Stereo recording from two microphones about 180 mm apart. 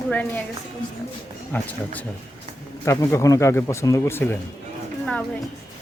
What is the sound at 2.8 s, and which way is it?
Speech, 15° left (ahead or behind).